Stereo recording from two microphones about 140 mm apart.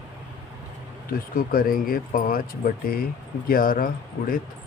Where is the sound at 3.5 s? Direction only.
90° left.